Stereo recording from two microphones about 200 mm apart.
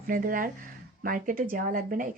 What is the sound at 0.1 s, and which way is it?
Speech, 45° right (ahead or behind).